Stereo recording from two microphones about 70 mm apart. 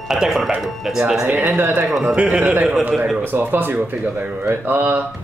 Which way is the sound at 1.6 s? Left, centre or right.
Right.